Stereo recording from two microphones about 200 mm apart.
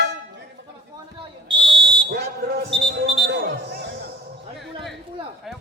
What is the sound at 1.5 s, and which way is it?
Fire alarm, 25° right (ahead or behind).